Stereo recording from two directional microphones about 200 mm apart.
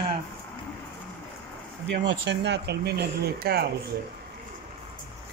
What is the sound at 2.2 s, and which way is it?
Speech, 60° right (ahead or behind).